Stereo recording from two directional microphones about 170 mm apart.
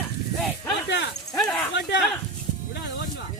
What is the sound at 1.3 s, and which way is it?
Dog, 10° left (ahead or behind).